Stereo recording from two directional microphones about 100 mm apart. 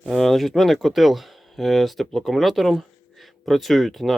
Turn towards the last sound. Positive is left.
turn(degrees=0)  # may be behind; listen again after turning